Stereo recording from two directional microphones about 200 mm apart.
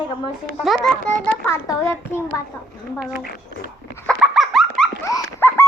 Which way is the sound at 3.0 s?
5° right (ahead or behind).